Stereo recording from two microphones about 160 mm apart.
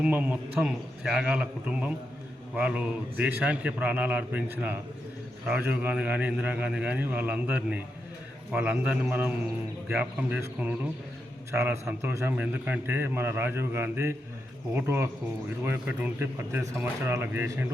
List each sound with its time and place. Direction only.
0.0 s a man's voice: 10° right (ahead or behind)